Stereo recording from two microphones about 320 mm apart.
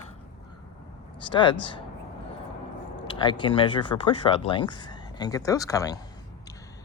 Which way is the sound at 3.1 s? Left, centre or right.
Centre.